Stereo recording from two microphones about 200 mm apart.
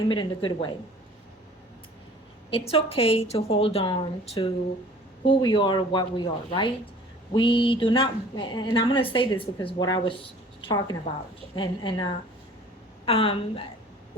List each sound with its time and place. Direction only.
0.1 s a woman's voice: 25° left (ahead or behind)
2.5 s a woman's voice: 30° left (ahead or behind)